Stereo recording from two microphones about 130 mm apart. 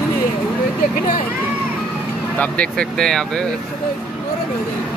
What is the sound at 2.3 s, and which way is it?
Speech, 10° left (ahead or behind).